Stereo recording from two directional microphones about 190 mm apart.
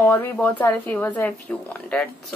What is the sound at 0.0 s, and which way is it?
Speech, 10° left (ahead or behind).